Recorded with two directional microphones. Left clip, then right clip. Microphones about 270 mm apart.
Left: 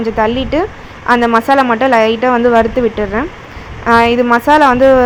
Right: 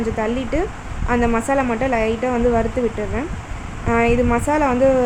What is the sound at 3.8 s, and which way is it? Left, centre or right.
Speech, centre.